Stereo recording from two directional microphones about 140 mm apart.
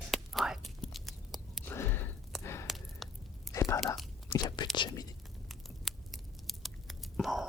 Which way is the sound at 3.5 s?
20° left (ahead or behind).